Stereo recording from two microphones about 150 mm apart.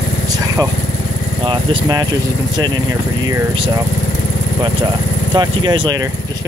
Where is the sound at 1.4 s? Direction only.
35° right (ahead or behind).